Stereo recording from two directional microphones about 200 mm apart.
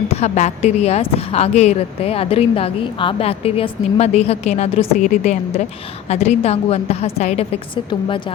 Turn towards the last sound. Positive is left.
turn(degrees=30)  # may be behind; listen again after turning